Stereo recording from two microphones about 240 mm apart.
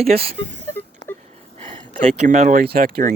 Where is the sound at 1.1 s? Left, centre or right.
Centre.